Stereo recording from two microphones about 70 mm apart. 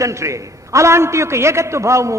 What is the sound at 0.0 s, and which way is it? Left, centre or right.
A man's voice, right.